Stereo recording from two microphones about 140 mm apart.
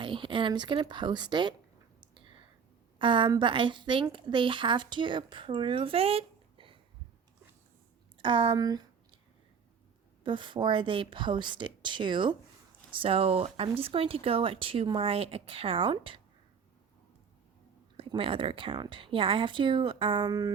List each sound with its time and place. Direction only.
0.0 s a woman's voice: 35° right (ahead or behind)
2.0 s clicking: 35° right (ahead or behind)
3.0 s a woman's voice: 35° right (ahead or behind)
8.2 s a woman's voice: 35° right (ahead or behind)
10.2 s a woman's voice: 35° right (ahead or behind)
17.9 s a woman's voice: 40° right (ahead or behind)